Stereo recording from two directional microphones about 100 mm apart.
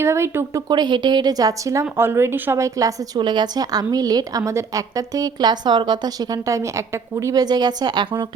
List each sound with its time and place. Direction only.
0.0 s speech: 25° right (ahead or behind)
0.7 s a woman's voice: 50° right (ahead or behind); by 7.4 s 30° right (ahead or behind)
7.4 s a woman's voice: 45° right (ahead or behind)